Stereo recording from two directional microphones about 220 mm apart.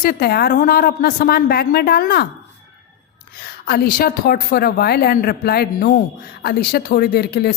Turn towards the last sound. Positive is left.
turn(degrees=45)  # may be behind; listen again after turning